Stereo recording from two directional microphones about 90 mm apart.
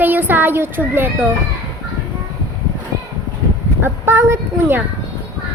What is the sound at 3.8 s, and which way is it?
A woman's voice, 25° right (ahead or behind).